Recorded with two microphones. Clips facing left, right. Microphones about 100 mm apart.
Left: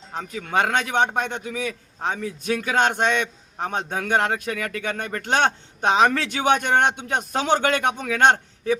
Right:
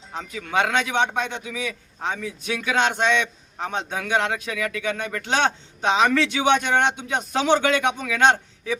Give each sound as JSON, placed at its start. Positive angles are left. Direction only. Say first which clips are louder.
{"t": 0.2, "sound": "a man's voice", "louder": "left 1 dB", "side_deg": 40}